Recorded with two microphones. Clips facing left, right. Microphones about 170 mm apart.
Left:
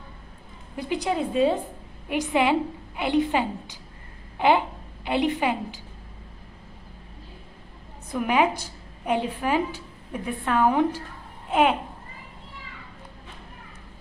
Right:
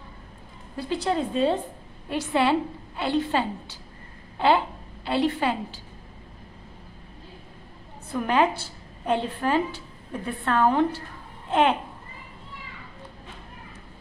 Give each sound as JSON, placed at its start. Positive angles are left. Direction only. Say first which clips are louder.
{"t": 0.7, "sound": "a woman's voice", "louder": "even", "side_deg": 15}
{"t": 8.1, "sound": "a woman's voice", "louder": "even", "side_deg": 10}